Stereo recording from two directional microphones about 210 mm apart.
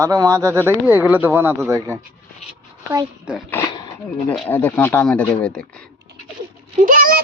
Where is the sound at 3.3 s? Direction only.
5° right (ahead or behind).